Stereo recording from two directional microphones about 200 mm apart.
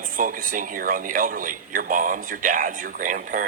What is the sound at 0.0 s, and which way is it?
A man's voice, 45° right (ahead or behind).